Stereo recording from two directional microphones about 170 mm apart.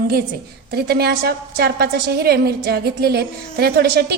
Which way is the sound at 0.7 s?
65° right (ahead or behind).